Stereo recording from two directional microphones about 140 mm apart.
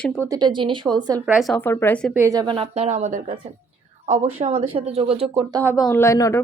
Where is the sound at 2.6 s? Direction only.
50° right (ahead or behind); by 3.3 s 70° right (ahead or behind).